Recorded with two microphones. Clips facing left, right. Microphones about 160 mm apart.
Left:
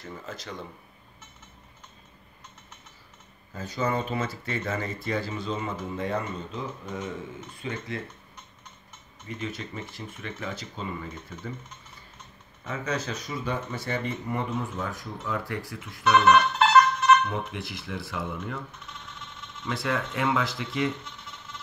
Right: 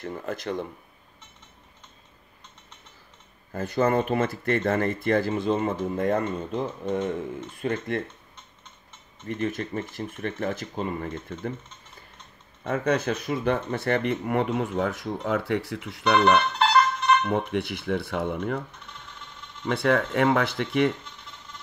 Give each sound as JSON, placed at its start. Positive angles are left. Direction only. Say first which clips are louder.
{"t": 0.0, "sound": "speech", "louder": "right 7 dB", "side_deg": -55}
{"t": 3.5, "sound": "speech", "louder": "right 6 dB", "side_deg": -55}
{"t": 9.3, "sound": "speech", "louder": "right 7 dB", "side_deg": -50}
{"t": 12.6, "sound": "speech", "louder": "right 7 dB", "side_deg": -55}
{"t": 19.7, "sound": "speech", "louder": "right 7 dB", "side_deg": -60}